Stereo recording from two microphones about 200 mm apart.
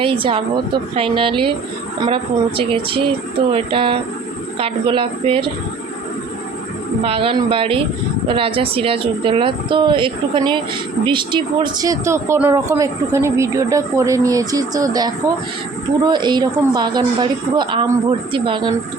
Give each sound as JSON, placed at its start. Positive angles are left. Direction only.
{"t": 0.0, "sound": "a woman's voice", "side_deg": -25}
{"t": 7.0, "sound": "a woman's voice", "side_deg": -25}